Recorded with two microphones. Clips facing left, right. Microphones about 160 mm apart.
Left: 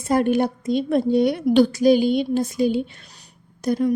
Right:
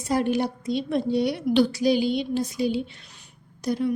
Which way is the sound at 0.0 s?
55° left (ahead or behind).